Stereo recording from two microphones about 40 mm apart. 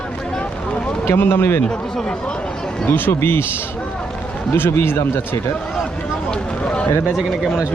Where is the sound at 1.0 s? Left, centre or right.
Left.